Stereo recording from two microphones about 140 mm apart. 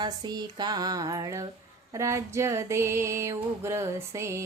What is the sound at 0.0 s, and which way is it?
Mantra, 30° right (ahead or behind).